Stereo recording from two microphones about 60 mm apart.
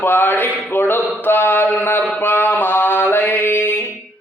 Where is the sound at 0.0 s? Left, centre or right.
Left.